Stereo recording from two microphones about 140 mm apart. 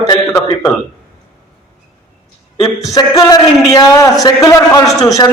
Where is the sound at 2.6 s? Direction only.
25° left (ahead or behind).